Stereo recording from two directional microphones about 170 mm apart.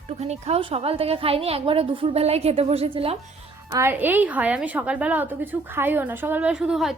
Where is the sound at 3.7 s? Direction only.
15° right (ahead or behind).